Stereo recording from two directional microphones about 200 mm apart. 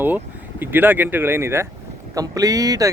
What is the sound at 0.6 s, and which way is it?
Speech, 10° right (ahead or behind).